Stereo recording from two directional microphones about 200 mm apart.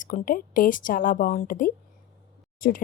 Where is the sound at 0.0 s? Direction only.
45° left (ahead or behind).